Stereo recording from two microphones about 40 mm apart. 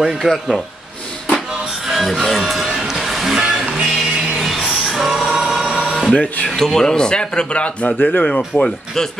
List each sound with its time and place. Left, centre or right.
0.0 s a man's voice: centre
1.9 s music: centre
3.3 s music: centre
4.4 s music: centre
5.5 s printer: centre
6.4 s speech: centre; by 7.9 s left
8.0 s speech: left
8.5 s speech: centre